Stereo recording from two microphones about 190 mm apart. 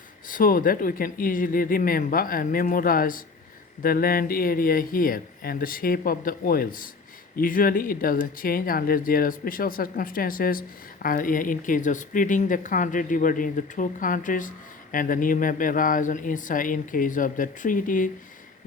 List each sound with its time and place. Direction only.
0.3 s speech: 45° left (ahead or behind)